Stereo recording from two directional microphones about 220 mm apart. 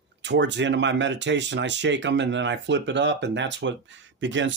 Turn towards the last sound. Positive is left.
turn(degrees=-55)  # may be behind; listen again after turning